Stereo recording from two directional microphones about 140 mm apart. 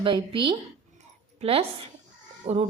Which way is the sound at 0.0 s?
35° right (ahead or behind).